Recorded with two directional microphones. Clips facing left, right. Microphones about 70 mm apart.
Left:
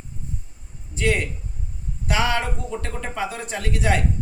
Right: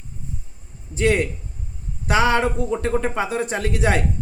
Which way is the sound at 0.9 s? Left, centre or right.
Right.